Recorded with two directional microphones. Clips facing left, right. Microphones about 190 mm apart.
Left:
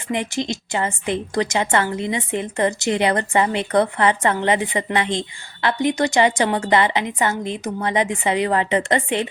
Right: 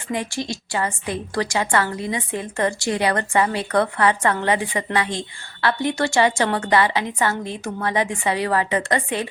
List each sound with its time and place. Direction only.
0.1 s a woman's voice: 20° left (ahead or behind)